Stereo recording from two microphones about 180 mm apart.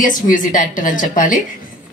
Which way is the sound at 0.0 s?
50° left (ahead or behind).